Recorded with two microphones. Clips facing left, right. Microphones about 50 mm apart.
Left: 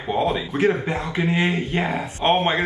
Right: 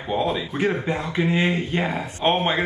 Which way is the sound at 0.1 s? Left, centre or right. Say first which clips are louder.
Left 2 dB; centre.